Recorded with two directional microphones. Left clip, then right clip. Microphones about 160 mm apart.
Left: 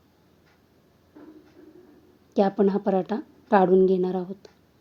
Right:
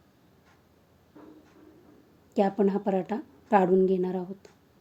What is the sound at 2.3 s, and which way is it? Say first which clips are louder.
A woman's voice: left 3 dB; 15° left (ahead or behind).